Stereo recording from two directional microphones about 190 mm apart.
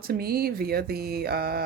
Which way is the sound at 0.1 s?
55° right (ahead or behind).